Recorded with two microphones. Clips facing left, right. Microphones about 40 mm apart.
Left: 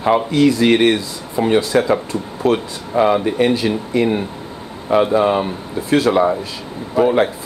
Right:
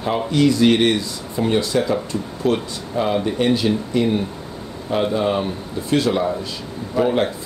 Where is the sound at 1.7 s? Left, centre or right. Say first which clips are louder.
Left 5 dB; left.